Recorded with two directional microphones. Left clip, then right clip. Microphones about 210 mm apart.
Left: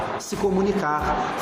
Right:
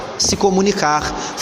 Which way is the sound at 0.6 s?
30° right (ahead or behind).